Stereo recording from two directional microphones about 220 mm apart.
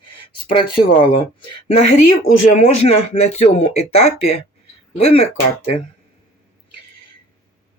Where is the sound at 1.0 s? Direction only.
25° left (ahead or behind).